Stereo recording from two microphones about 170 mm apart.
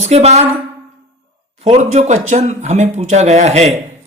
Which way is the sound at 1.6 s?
40° right (ahead or behind).